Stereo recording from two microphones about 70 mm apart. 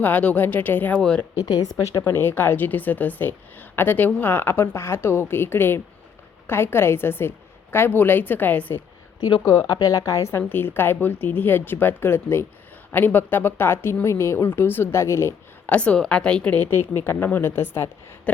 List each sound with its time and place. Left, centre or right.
0.0 s speech: left
1.4 s speech: left
2.0 s a woman's voice: left
9.4 s a woman's voice: left
9.6 s speech: left
10.0 s a woman's voice: left
10.3 s a woman's voice: left
15.6 s a woman's voice: left
16.6 s a woman's voice: left